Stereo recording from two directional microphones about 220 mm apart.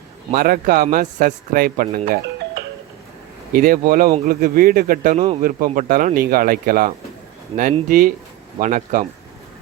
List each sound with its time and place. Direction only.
0.3 s a man's voice: 40° right (ahead or behind)
3.5 s a man's voice: 40° right (ahead or behind)